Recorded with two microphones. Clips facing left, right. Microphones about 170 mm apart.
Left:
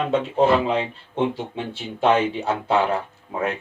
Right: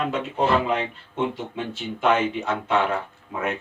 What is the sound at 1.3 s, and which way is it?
Speech, 30° left (ahead or behind).